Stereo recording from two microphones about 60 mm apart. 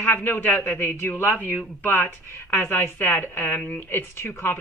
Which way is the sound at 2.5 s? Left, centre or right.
Left.